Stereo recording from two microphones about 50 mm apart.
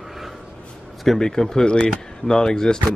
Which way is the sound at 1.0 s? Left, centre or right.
Centre.